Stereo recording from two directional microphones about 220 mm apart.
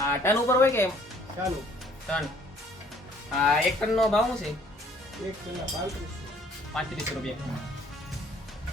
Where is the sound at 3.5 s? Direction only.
Centre (ahead or behind).